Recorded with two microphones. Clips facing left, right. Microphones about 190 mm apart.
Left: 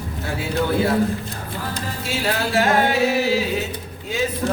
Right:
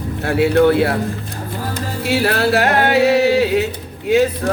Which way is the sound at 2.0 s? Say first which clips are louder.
Right 8 dB; 65° right (ahead or behind).